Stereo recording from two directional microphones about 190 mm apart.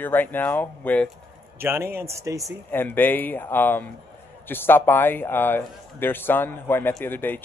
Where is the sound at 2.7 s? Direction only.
10° left (ahead or behind).